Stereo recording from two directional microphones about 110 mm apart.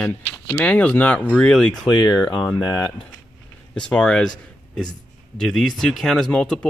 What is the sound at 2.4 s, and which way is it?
Speech, 30° left (ahead or behind).